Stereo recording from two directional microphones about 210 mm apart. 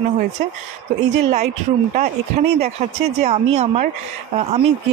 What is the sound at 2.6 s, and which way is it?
Speech, 30° right (ahead or behind).